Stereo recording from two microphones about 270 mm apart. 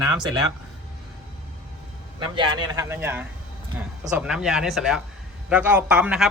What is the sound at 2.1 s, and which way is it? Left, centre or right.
A man's voice, centre.